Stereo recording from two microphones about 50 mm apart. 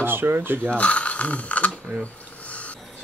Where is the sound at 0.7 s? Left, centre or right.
Left.